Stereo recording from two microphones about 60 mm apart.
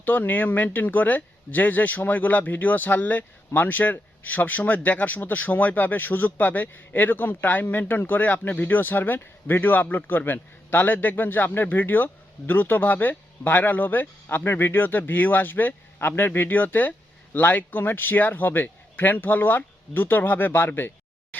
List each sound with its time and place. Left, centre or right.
0.0 s speech: left